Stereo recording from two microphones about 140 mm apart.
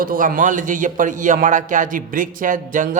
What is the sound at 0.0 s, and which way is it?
A man's voice, 80° right.